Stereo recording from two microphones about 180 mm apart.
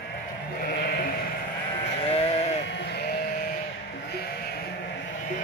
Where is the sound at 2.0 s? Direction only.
35° left (ahead or behind).